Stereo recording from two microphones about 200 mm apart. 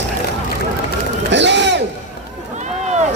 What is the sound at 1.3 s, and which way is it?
Crowd, 60° right (ahead or behind).